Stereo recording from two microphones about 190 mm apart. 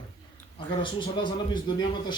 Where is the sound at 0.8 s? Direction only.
25° left (ahead or behind).